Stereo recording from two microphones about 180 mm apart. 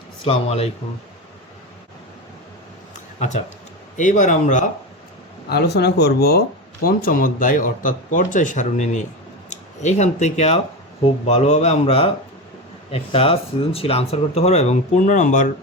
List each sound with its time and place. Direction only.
0.3 s speech: 35° left (ahead or behind)
3.9 s speech: 45° left (ahead or behind)
5.5 s speech: 65° left (ahead or behind)
6.8 s speech: 50° left (ahead or behind)